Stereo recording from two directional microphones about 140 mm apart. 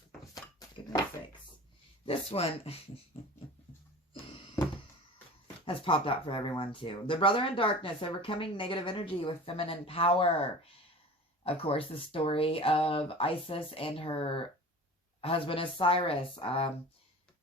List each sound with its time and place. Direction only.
0.8 s a sound: 35° left (ahead or behind)
2.0 s speech: 45° left (ahead or behind)
5.6 s speech: 40° left (ahead or behind)